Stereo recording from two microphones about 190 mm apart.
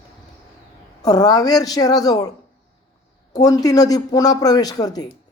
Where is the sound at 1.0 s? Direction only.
20° left (ahead or behind).